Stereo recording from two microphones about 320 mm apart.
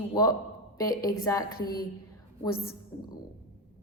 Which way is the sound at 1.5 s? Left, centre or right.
Left.